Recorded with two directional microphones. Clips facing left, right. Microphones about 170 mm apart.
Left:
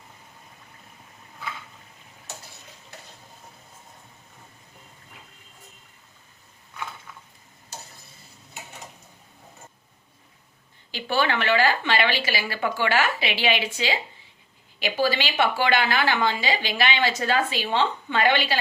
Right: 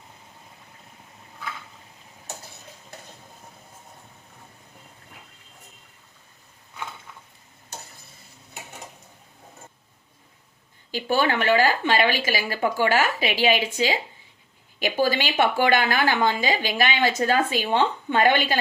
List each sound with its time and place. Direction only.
11.1 s a woman's voice: 45° right (ahead or behind)